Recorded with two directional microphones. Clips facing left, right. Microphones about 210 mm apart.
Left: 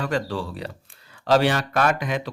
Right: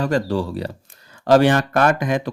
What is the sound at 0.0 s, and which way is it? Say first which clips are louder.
Speech: right 6 dB; 40° right (ahead or behind).